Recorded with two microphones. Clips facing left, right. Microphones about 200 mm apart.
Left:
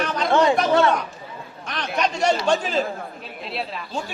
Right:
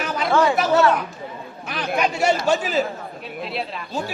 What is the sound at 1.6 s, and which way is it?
Chatter, 5° right (ahead or behind).